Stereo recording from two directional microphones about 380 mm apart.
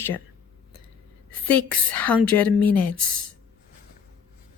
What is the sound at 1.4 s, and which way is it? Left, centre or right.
A woman's voice, centre.